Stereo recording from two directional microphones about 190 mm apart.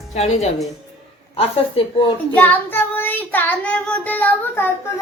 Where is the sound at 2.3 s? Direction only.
10° left (ahead or behind).